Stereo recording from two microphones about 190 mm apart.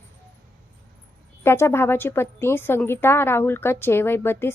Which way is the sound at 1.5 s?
10° left (ahead or behind).